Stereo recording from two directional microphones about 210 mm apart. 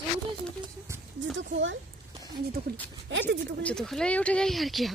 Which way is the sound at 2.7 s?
50° right (ahead or behind).